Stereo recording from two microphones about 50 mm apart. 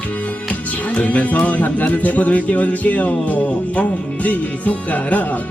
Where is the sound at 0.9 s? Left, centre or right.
Left.